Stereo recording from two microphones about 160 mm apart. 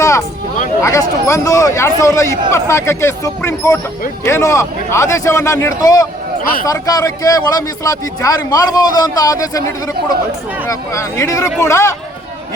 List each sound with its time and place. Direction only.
0.8 s speech: 20° left (ahead or behind)
10.7 s speech: 20° left (ahead or behind)